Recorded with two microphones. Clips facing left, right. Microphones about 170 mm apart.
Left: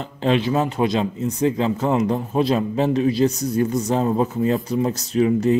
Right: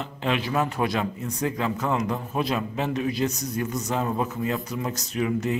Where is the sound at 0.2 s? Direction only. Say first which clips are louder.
Left 6 dB; 30° left (ahead or behind).